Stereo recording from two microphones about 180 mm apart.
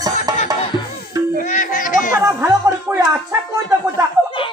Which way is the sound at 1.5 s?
45° left (ahead or behind).